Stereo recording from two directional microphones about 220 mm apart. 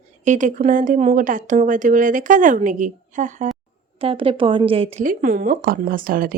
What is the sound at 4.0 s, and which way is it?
A woman's voice, 25° right (ahead or behind).